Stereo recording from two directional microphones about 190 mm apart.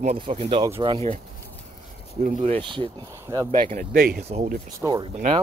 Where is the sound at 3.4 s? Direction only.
45° right (ahead or behind).